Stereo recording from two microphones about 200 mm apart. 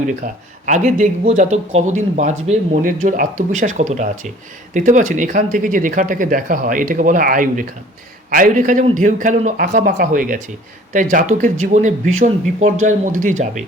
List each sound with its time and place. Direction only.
0.2 s speech: 40° right (ahead or behind)